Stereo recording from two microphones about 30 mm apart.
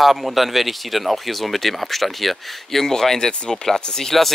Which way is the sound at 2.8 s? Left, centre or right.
Centre.